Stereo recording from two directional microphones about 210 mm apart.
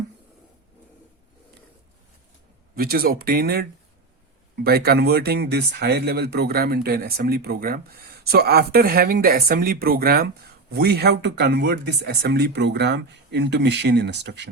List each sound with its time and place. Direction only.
2.7 s speech: 45° right (ahead or behind)